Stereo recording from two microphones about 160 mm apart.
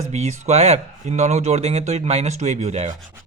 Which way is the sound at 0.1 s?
45° right (ahead or behind).